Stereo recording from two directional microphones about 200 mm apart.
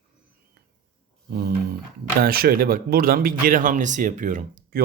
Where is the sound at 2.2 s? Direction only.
50° right (ahead or behind).